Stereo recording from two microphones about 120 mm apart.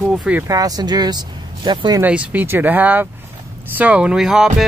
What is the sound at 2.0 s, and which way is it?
Speech, 10° right (ahead or behind).